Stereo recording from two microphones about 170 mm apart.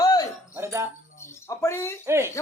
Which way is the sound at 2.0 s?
15° right (ahead or behind).